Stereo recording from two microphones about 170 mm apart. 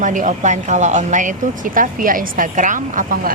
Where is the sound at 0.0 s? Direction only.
50° right (ahead or behind).